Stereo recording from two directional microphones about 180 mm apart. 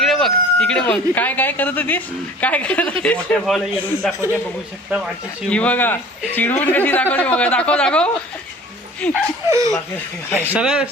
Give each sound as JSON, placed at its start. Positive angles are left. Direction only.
{"t": 0.0, "sound": "a man's voice", "side_deg": 0}
{"t": 4.9, "sound": "speech", "side_deg": -10}
{"t": 5.5, "sound": "a man's voice", "side_deg": 5}
{"t": 9.5, "sound": "speech", "side_deg": -20}
{"t": 10.5, "sound": "speech", "side_deg": -5}